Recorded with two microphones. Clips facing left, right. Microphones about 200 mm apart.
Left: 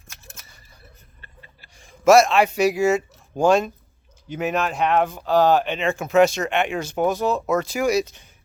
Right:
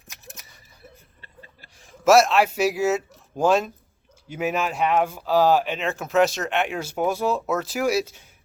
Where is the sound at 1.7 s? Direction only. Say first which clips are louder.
Left 2 dB; 5° right (ahead or behind).